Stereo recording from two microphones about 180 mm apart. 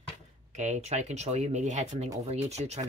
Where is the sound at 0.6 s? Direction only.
40° right (ahead or behind).